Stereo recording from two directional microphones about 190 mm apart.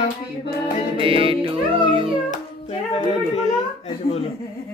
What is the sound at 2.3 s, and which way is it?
Music, 30° left (ahead or behind).